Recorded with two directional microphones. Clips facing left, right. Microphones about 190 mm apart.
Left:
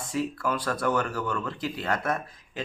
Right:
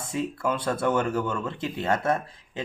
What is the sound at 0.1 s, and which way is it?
Speech, 20° right (ahead or behind).